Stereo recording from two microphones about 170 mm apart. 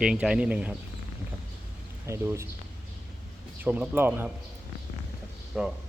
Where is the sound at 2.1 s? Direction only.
15° right (ahead or behind).